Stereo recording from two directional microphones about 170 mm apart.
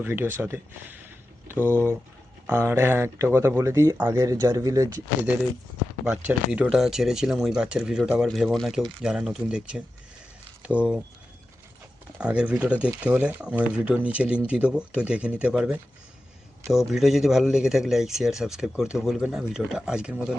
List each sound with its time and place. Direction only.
0.0 s speech: 15° right (ahead or behind)
1.5 s speech: 10° left (ahead or behind)
2.5 s speech: 15° right (ahead or behind)
6.1 s speech: 5° right (ahead or behind)
12.2 s speech: 5° right (ahead or behind)